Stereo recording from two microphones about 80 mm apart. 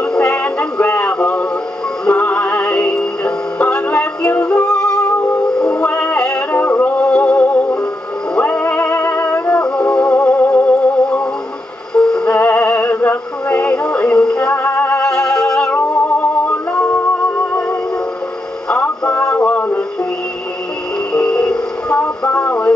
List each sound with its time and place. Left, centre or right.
0.0 s music: centre
15.0 s music: centre
15.7 s music: left
18.7 s music: centre
21.1 s music: centre